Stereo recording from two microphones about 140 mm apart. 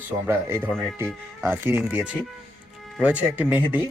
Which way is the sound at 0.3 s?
15° right (ahead or behind).